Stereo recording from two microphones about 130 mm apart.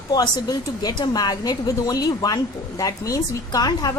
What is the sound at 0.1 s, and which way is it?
A woman's voice, 30° left (ahead or behind).